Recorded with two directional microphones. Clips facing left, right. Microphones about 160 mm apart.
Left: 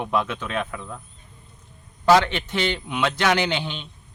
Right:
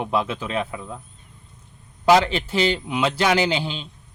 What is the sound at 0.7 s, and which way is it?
Speech, 15° right (ahead or behind).